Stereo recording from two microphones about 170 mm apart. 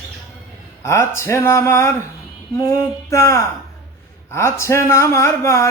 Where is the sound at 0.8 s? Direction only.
15° left (ahead or behind).